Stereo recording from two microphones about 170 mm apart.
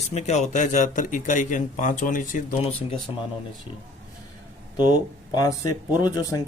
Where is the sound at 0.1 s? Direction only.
40° left (ahead or behind).